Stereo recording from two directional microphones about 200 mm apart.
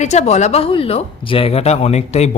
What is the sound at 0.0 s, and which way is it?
A woman's voice, 35° left (ahead or behind).